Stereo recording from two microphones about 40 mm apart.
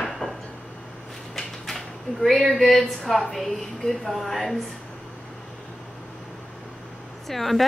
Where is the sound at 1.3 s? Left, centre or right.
Centre.